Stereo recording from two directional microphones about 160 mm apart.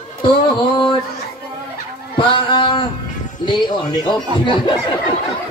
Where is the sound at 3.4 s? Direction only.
30° left (ahead or behind).